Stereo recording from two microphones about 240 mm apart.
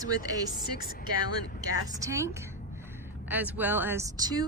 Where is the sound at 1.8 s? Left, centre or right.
Centre.